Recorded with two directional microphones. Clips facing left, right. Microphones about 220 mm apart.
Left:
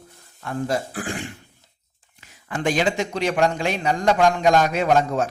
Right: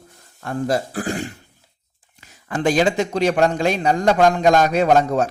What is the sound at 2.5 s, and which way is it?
Speech, 40° right (ahead or behind).